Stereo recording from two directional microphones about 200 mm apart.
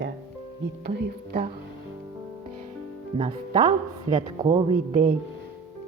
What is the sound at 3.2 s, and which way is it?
Speech, 25° right (ahead or behind).